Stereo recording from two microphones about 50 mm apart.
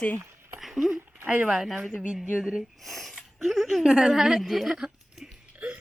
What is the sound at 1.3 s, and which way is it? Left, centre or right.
Speech, centre.